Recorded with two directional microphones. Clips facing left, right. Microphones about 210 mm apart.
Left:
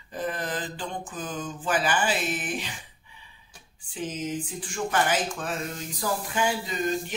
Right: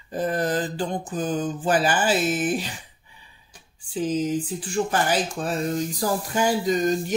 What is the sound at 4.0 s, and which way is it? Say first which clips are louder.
Speech: right 7 dB; 35° right (ahead or behind).